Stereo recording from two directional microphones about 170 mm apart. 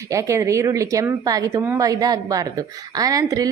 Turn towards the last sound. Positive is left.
turn(degrees=-20)  # may be behind; listen again after turning